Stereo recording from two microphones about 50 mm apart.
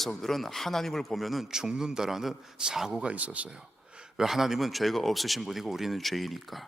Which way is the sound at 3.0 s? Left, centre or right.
Right.